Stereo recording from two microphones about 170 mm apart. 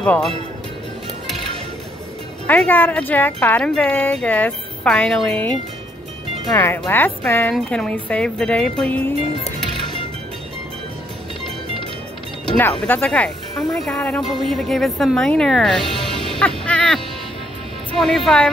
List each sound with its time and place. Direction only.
0.0 s speech: 5° left (ahead or behind)
2.4 s speech: 10° left (ahead or behind)
6.5 s speech: 15° left (ahead or behind)
12.5 s speech: 10° left (ahead or behind)
16.3 s music: 5° left (ahead or behind)
17.9 s speech: centre (ahead or behind)